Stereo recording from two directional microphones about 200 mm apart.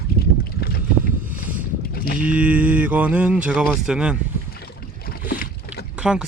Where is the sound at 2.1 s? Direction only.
5° right (ahead or behind).